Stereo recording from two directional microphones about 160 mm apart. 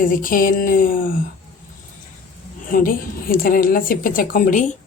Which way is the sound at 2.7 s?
60° left (ahead or behind).